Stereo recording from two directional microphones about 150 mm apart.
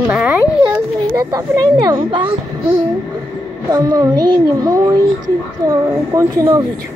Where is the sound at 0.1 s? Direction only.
10° right (ahead or behind).